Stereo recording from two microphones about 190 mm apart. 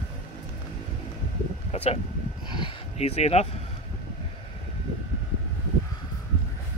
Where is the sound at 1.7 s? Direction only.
30° left (ahead or behind).